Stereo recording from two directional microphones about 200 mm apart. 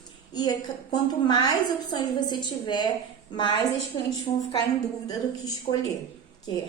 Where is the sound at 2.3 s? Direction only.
20° left (ahead or behind).